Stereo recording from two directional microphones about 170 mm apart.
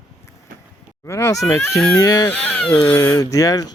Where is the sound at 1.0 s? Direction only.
15° left (ahead or behind).